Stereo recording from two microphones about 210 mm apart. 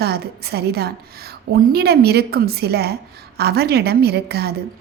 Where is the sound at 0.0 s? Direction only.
50° right (ahead or behind).